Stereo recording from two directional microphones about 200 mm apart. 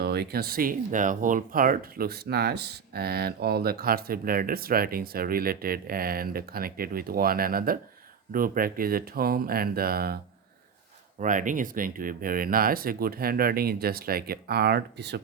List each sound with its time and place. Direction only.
0.0 s speech: 55° right (ahead or behind)
11.2 s speech: 40° right (ahead or behind); by 15.2 s 55° right (ahead or behind)